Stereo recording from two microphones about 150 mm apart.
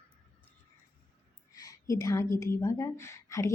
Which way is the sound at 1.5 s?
20° left (ahead or behind).